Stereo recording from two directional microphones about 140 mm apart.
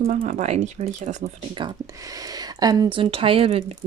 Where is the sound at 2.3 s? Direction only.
30° right (ahead or behind).